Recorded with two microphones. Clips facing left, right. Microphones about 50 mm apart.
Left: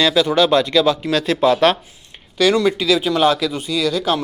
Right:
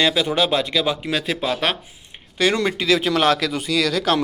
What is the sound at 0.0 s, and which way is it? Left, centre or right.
Speech, centre.